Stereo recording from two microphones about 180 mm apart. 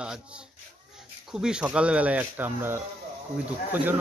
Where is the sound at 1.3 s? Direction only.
5° right (ahead or behind).